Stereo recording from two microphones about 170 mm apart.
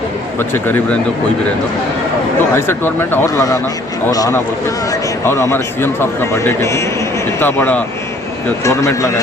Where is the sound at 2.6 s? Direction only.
15° left (ahead or behind).